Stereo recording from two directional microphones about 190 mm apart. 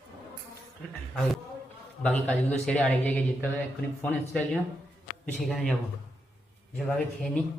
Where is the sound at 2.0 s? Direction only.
5° left (ahead or behind).